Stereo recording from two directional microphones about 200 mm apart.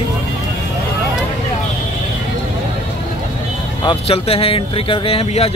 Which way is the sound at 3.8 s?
30° left (ahead or behind).